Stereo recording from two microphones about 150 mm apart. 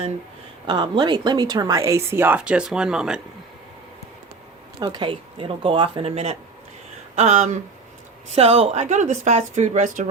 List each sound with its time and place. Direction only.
0.7 s speech: 30° right (ahead or behind); by 3.2 s 5° right (ahead or behind)
4.8 s a woman's voice: 30° right (ahead or behind); by 10.1 s 55° right (ahead or behind)